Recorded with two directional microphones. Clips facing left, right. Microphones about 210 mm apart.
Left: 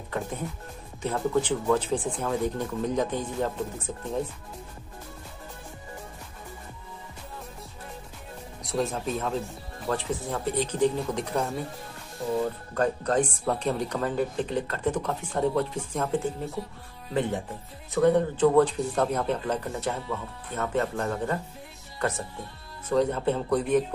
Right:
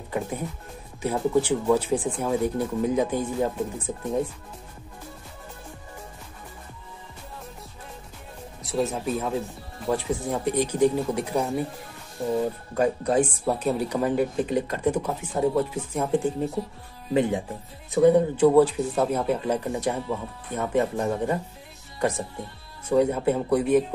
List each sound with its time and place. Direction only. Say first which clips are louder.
1.0 s speech: right 3 dB; 10° right (ahead or behind)
8.6 s speech: right 2 dB; 5° right (ahead or behind)
12.2 s speech: right 3 dB; 30° right (ahead or behind)
12.7 s speech: right 3 dB; 10° right (ahead or behind)
22.8 s speech: right 3 dB; 10° right (ahead or behind)